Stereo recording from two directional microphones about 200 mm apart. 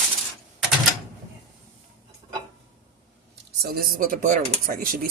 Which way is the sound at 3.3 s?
55° right (ahead or behind).